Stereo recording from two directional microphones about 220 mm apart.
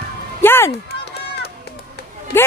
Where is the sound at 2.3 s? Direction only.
10° left (ahead or behind).